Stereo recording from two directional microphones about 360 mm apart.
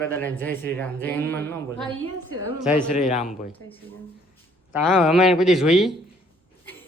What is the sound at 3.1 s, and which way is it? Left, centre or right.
Speech, centre.